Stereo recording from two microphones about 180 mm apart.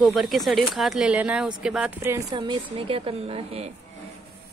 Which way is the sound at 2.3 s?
30° right (ahead or behind).